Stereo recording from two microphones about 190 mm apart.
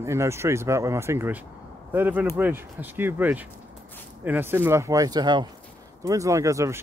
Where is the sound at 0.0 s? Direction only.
15° right (ahead or behind).